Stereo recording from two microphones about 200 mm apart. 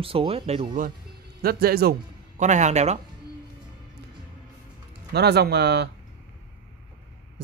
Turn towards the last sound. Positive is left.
turn(degrees=-55)  # may be behind; listen again after turning